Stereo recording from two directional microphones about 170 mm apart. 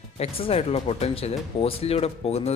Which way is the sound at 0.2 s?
35° left (ahead or behind).